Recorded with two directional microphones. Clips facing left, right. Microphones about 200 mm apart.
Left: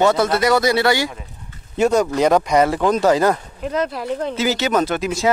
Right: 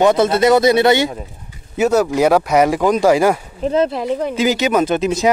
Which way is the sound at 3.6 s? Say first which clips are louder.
Right 6 dB; 30° right (ahead or behind).